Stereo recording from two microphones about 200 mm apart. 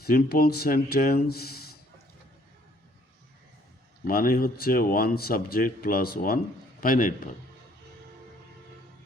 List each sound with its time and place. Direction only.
0.0 s a man's voice: 50° left (ahead or behind)
4.0 s a man's voice: 45° left (ahead or behind)